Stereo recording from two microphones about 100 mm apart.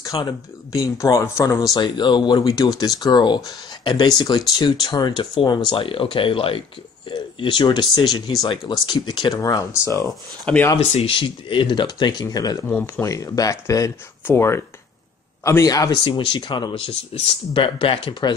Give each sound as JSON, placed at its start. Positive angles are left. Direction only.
{"t": 0.0, "sound": "a sound", "side_deg": 40}
{"t": 0.7, "sound": "speech", "side_deg": 35}
{"t": 9.4, "sound": "speech", "side_deg": 30}
{"t": 10.0, "sound": "speech", "side_deg": 10}
{"t": 10.8, "sound": "speech", "side_deg": 80}
{"t": 12.6, "sound": "speech", "side_deg": 20}
{"t": 13.0, "sound": "speech", "side_deg": 35}
{"t": 15.9, "sound": "speech", "side_deg": 55}
{"t": 17.1, "sound": "speech", "side_deg": 80}
{"t": 17.6, "sound": "speech", "side_deg": 60}